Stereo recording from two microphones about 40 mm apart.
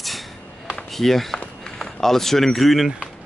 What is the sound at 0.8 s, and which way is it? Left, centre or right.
A man's voice, centre.